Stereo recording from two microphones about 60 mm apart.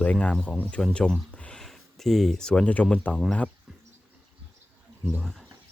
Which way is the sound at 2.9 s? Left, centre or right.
Left.